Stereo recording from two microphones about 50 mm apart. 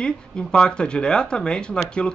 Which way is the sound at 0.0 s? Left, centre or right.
Centre.